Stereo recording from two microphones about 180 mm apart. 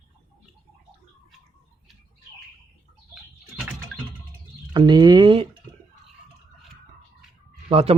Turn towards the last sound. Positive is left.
turn(degrees=-35)  # may be behind; listen again after turning